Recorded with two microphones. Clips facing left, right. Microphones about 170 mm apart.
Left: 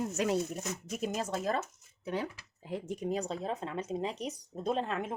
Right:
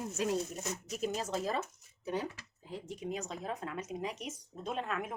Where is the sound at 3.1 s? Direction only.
35° left (ahead or behind).